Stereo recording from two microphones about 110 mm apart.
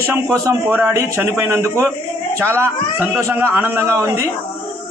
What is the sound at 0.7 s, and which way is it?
A man's voice, 15° right (ahead or behind).